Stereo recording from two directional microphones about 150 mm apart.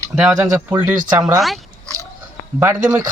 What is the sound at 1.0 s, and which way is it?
Speech, 25° right (ahead or behind).